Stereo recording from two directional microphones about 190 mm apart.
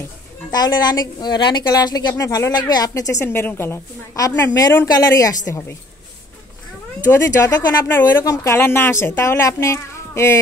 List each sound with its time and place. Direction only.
0.5 s a woman's voice: 20° left (ahead or behind)
7.1 s speech: 15° left (ahead or behind)